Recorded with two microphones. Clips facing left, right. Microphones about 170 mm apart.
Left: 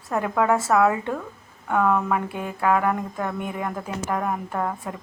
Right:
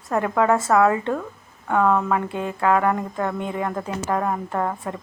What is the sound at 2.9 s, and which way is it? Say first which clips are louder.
Speech: right 2 dB; 10° left (ahead or behind).